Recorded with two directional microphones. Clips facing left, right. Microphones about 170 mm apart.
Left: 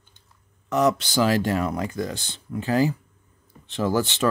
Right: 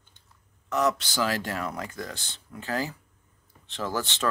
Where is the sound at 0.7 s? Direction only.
15° left (ahead or behind).